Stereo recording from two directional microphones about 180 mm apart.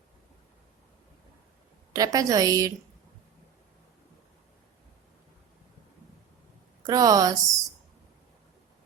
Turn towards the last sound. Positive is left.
turn(degrees=-20)  # may be behind; listen again after turning